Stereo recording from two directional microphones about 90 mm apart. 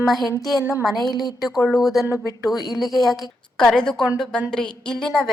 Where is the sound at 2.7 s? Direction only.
Centre (ahead or behind).